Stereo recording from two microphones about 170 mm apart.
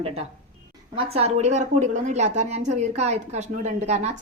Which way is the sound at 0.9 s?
35° right (ahead or behind).